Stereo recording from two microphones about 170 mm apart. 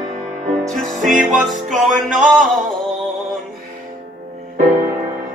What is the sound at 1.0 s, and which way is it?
Music, 50° right (ahead or behind).